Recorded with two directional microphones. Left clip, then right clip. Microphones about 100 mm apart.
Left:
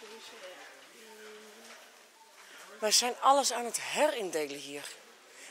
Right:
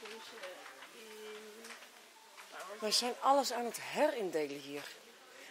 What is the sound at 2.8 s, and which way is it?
Speech, 25° left (ahead or behind).